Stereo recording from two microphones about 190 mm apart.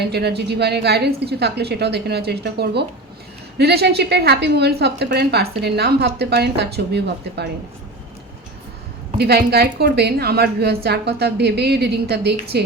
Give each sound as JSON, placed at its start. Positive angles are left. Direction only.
{"t": 0.0, "sound": "a woman's voice", "side_deg": -60}
{"t": 9.1, "sound": "a woman's voice", "side_deg": -55}